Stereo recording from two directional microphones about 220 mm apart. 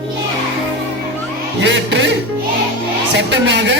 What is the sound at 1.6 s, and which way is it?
Music, 55° right (ahead or behind).